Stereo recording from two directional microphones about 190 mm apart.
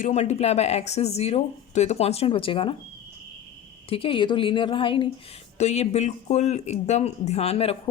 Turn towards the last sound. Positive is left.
turn(degrees=35)  # may be behind; listen again after turning